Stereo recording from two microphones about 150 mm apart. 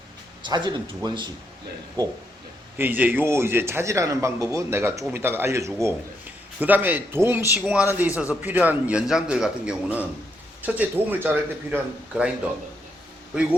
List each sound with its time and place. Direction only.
0.4 s speech: 30° right (ahead or behind)
2.7 s a man's voice: 15° right (ahead or behind)